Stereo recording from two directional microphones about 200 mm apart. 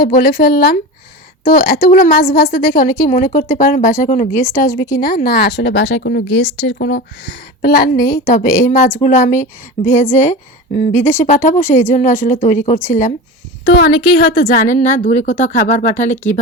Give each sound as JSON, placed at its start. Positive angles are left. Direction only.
{"t": 0.0, "sound": "a woman's voice", "side_deg": 45}
{"t": 4.3, "sound": "speech", "side_deg": 15}
{"t": 4.9, "sound": "speech", "side_deg": 45}
{"t": 8.6, "sound": "a woman's voice", "side_deg": 40}
{"t": 13.7, "sound": "speech", "side_deg": 50}
{"t": 14.5, "sound": "a woman's voice", "side_deg": 40}